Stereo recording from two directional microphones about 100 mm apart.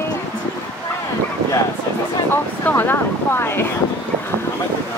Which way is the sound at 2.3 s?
20° left (ahead or behind).